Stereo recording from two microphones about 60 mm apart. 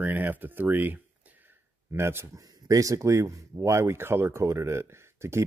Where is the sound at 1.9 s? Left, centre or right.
Right.